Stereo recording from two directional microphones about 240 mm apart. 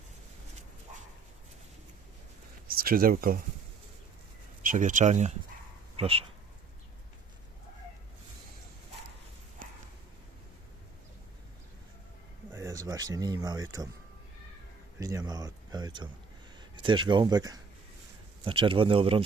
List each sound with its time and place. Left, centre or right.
2.6 s speech: right
4.6 s speech: right
9.6 s a sound: right
12.5 s speech: centre
14.9 s speech: centre